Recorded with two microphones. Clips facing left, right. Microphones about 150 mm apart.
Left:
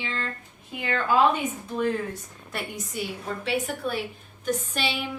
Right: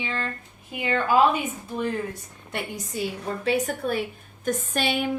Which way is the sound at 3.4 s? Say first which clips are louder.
Right 4 dB; 45° right (ahead or behind).